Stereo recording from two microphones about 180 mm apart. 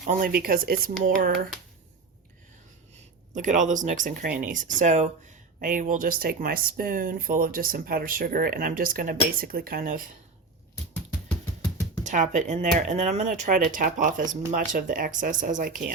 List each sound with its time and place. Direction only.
0.0 s speech: 50° right (ahead or behind)
3.3 s speech: 45° right (ahead or behind)
12.0 s speech: 45° right (ahead or behind)